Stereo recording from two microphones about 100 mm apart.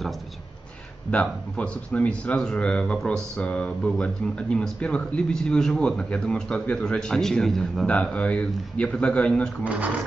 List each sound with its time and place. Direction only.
1.2 s speech: 10° left (ahead or behind)